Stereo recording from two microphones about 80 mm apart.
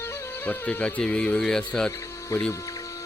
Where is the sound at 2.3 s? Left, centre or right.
Left.